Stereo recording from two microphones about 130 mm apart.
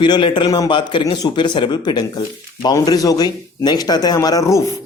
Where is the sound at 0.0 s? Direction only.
35° left (ahead or behind).